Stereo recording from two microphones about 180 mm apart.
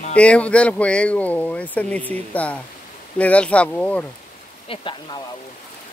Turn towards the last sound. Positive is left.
turn(degrees=30)  # may be behind; listen again after turning